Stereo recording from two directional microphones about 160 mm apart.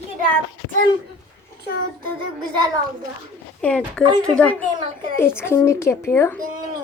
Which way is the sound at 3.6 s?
5° left (ahead or behind).